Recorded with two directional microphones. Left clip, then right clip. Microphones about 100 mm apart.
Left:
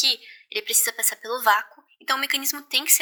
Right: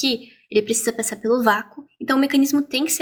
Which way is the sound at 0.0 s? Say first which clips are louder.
Left 1 dB; 45° left (ahead or behind).